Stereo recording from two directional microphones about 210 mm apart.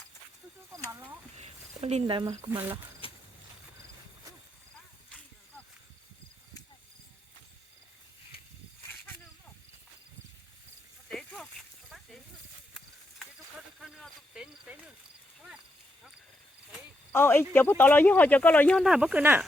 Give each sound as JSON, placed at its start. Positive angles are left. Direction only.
{"t": 0.9, "sound": "speech", "side_deg": -15}
{"t": 1.4, "sound": "speech", "side_deg": -30}
{"t": 3.0, "sound": "a sound", "side_deg": 25}
{"t": 11.1, "sound": "a sound", "side_deg": 0}
{"t": 13.7, "sound": "cricket", "side_deg": 0}
{"t": 17.1, "sound": "cricket", "side_deg": 10}
{"t": 17.5, "sound": "speech", "side_deg": 10}